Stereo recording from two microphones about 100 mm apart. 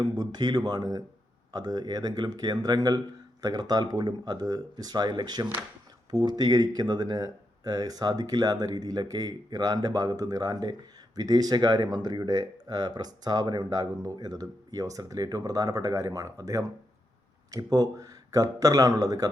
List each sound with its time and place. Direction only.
0.0 s speech: 45° right (ahead or behind)